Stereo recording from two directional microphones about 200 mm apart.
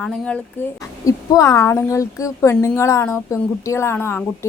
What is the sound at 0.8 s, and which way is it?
A woman's voice, 15° left (ahead or behind).